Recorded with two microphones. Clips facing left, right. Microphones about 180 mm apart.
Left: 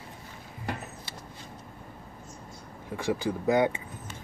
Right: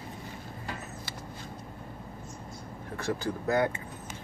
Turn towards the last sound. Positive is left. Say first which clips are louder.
# left 3 dB
turn(degrees=15)  # may be behind; listen again after turning